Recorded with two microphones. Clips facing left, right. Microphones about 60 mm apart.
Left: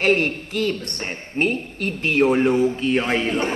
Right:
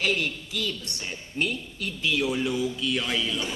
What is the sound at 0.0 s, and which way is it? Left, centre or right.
A man's voice, left.